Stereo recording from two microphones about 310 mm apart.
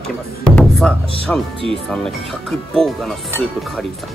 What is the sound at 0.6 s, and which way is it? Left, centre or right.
Music, centre.